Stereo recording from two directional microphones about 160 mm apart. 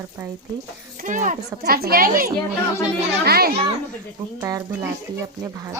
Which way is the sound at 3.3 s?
75° right (ahead or behind).